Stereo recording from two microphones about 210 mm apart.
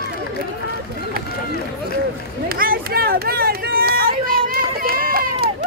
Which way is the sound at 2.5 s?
45° right (ahead or behind).